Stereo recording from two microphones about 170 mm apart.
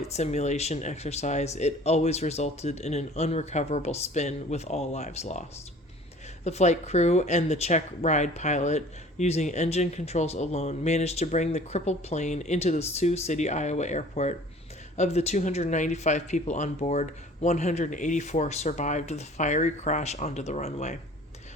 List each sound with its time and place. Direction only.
0.1 s speech: 40° left (ahead or behind)